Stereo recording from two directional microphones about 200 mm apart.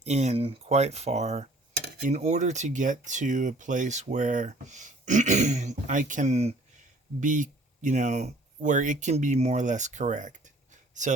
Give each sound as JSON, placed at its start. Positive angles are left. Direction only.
{"t": 0.0, "sound": "speech", "side_deg": -35}